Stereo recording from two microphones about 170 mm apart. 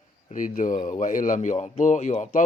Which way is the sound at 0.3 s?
50° left (ahead or behind).